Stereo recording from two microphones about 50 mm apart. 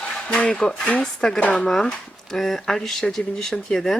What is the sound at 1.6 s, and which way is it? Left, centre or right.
Speech, centre.